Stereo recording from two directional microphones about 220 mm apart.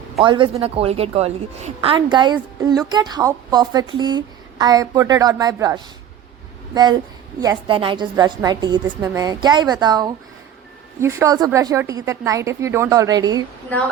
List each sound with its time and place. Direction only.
0.3 s a woman's voice: 20° right (ahead or behind)